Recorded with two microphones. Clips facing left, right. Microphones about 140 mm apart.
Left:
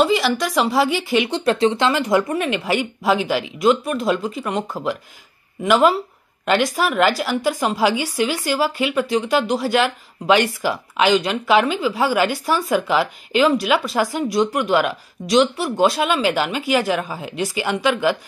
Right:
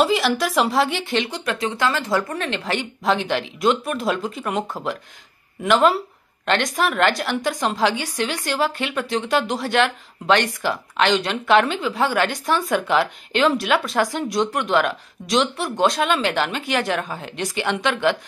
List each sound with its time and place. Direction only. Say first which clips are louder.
0.0 s a woman's voice: left 1 dB; centre (ahead or behind)
1.3 s speech: left 8 dB; 30° left (ahead or behind)
1.9 s a woman's voice: left 4 dB; 15° left (ahead or behind)